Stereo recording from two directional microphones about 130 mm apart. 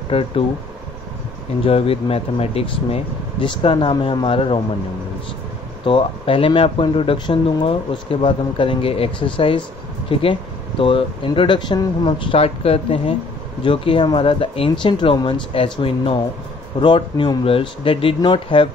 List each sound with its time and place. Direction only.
0.1 s speech: 45° left (ahead or behind)
1.6 s speech: 45° left (ahead or behind)
5.9 s speech: 40° left (ahead or behind)